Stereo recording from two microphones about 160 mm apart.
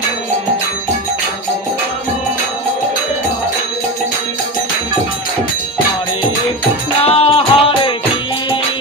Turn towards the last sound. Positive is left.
turn(degrees=35)  # may be behind; listen again after turning